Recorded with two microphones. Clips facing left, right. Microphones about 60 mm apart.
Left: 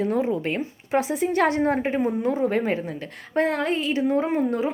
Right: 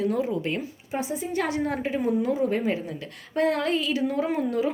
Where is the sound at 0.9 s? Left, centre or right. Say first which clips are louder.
Left 6 dB; left.